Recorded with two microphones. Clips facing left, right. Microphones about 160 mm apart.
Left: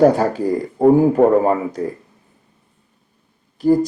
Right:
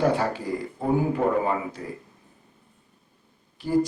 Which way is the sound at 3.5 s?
40° left (ahead or behind).